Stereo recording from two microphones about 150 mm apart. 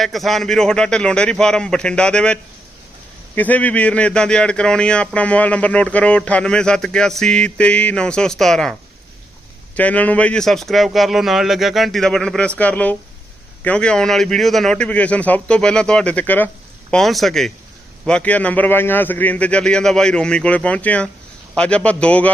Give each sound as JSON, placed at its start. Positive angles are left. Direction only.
{"t": 0.0, "sound": "a man's voice", "side_deg": 0}
{"t": 9.7, "sound": "a man's voice", "side_deg": 10}
{"t": 16.9, "sound": "a man's voice", "side_deg": 0}